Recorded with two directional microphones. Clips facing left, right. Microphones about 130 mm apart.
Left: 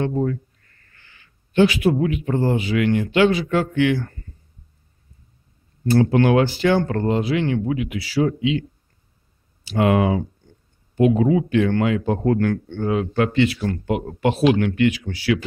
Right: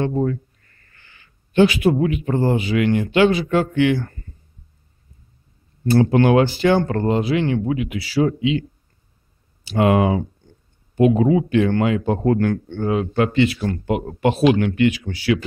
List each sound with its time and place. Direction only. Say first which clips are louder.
0.0 s speech: right 1 dB; 25° right (ahead or behind)
1.5 s speech: right 1 dB; 25° right (ahead or behind)
5.9 s speech: right 1 dB; 30° right (ahead or behind)
9.7 s speech: right 1 dB; 25° right (ahead or behind)